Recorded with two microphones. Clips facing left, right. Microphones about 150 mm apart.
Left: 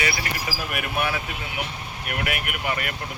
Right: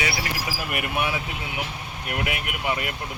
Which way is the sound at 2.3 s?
20° right (ahead or behind).